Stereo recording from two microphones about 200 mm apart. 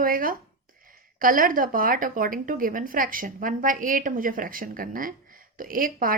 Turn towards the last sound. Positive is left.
turn(degrees=-45)  # may be behind; listen again after turning